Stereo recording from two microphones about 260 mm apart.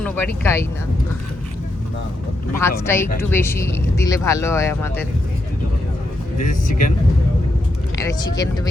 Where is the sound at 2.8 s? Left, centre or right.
Centre.